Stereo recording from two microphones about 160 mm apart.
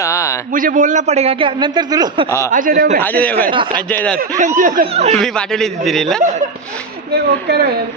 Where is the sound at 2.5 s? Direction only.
60° right (ahead or behind).